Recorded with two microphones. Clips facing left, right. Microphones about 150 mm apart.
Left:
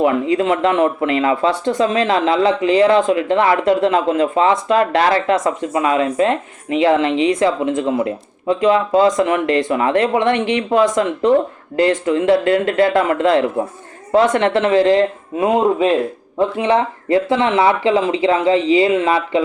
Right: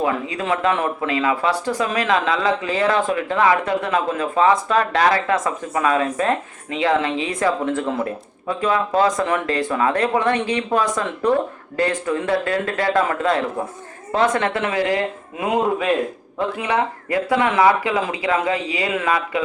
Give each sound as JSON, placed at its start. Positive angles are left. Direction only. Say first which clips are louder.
{"t": 0.0, "sound": "speech", "louder": "left 7 dB", "side_deg": 25}